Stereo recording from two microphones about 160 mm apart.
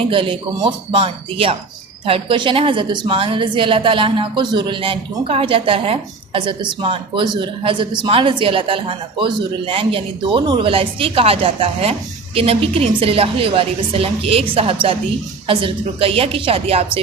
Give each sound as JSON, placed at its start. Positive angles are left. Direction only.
{"t": 0.1, "sound": "a woman's voice", "side_deg": -35}